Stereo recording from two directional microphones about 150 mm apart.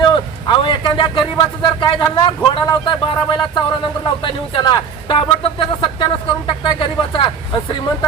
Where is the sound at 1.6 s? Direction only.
35° left (ahead or behind).